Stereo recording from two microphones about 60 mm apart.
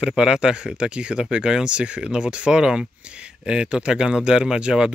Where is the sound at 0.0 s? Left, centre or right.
Centre.